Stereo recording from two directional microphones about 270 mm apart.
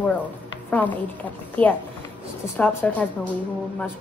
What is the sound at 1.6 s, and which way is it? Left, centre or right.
Speech, centre.